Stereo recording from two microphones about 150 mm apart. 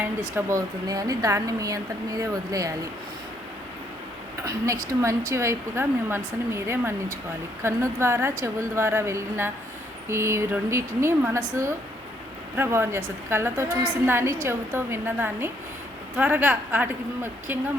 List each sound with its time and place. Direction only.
0.0 s a woman's voice: 20° right (ahead or behind)
4.4 s a woman's voice: 20° right (ahead or behind)